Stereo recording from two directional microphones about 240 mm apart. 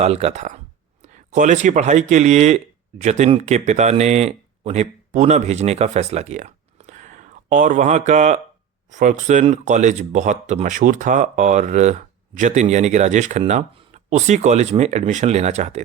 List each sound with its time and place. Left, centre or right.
0.0 s speech: right